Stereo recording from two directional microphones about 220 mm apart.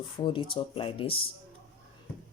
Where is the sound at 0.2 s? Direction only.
20° left (ahead or behind).